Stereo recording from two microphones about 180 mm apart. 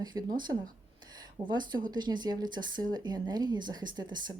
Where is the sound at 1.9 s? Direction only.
25° right (ahead or behind).